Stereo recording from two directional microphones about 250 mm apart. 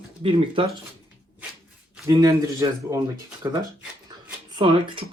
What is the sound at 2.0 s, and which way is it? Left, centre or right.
Speech, centre.